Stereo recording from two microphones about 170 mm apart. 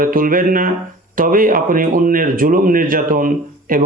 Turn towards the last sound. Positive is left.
turn(degrees=-55)  # may be behind; listen again after turning